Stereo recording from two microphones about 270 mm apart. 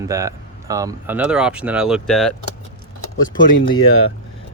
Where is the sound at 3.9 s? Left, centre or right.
Left.